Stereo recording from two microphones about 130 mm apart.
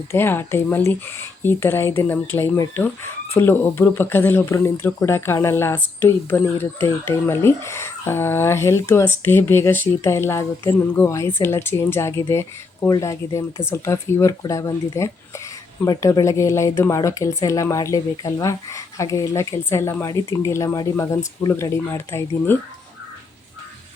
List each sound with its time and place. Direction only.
0.1 s speech: 15° left (ahead or behind)